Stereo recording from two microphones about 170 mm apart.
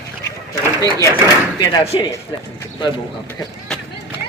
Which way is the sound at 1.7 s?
25° left (ahead or behind).